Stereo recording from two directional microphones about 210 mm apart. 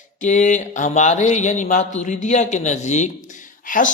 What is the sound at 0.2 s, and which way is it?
A man's voice, 35° left (ahead or behind).